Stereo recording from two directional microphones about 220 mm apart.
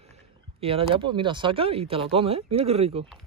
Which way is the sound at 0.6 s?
25° right (ahead or behind).